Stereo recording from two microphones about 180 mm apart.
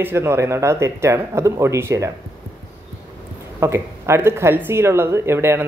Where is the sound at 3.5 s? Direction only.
15° right (ahead or behind).